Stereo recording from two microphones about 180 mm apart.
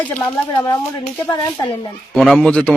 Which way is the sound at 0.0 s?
10° left (ahead or behind).